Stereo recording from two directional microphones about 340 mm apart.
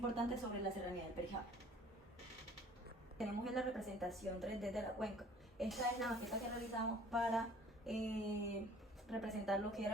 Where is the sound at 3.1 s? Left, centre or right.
Centre.